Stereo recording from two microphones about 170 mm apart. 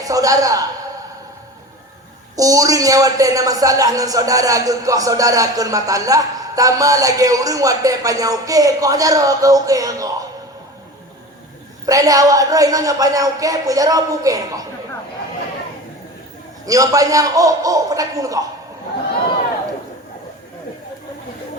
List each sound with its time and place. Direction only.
0.0 s a man's voice: 20° right (ahead or behind)
2.3 s a woman's voice: 20° right (ahead or behind)
11.9 s a woman's voice: 20° right (ahead or behind)
16.6 s a woman's voice: 20° right (ahead or behind)